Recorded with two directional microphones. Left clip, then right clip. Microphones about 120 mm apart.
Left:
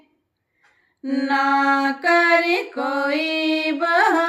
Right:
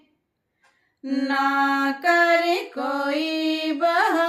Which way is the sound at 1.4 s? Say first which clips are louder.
Left 3 dB; 20° left (ahead or behind).